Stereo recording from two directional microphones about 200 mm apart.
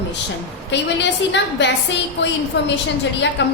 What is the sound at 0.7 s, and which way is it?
A woman's voice, 60° left (ahead or behind).